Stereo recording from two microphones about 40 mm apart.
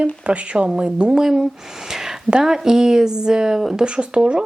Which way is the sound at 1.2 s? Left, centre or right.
Centre.